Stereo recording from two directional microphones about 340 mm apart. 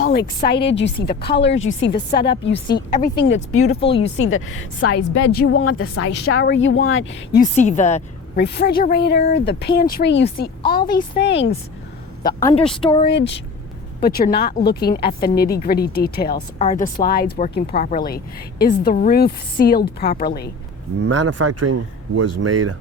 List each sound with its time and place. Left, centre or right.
0.0 s a woman's voice: left
2.5 s speech: centre
3.0 s speech: left
3.8 s speech: centre
4.2 s speech: left
7.5 s a woman's voice: left
12.2 s speech: centre
13.1 s a woman's voice: left
21.1 s speech: right